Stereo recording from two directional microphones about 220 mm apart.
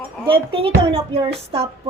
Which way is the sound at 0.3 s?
25° right (ahead or behind).